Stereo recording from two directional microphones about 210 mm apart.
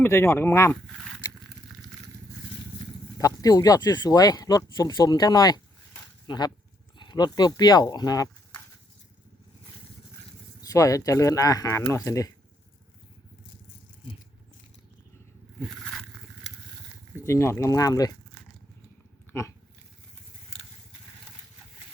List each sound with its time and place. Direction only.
0.0 s speech: 15° left (ahead or behind)
0.9 s speech: centre (ahead or behind)
1.7 s vehicle: centre (ahead or behind)
3.2 s speech: 15° left (ahead or behind)
10.6 s speech: 15° left (ahead or behind)
15.6 s vehicle: centre (ahead or behind)
17.2 s speech: 15° left (ahead or behind)
19.3 s dog: 15° left (ahead or behind)